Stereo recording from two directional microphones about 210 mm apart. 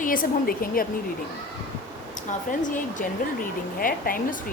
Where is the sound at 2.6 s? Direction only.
35° left (ahead or behind).